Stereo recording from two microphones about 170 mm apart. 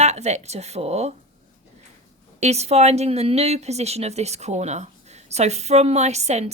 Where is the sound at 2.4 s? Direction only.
40° right (ahead or behind).